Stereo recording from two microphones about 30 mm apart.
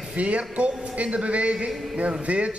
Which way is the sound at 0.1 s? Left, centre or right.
Right.